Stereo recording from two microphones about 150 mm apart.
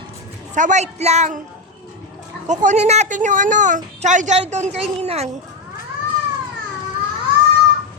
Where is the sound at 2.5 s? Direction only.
55° right (ahead or behind).